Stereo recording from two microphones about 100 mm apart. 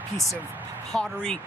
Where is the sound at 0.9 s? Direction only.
5° left (ahead or behind).